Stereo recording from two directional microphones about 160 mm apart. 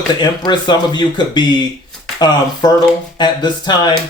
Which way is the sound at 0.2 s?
30° left (ahead or behind).